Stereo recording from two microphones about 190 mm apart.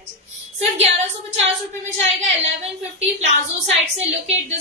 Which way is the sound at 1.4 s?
35° right (ahead or behind).